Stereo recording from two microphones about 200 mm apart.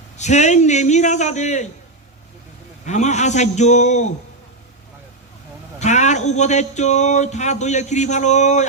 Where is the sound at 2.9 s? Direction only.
35° left (ahead or behind).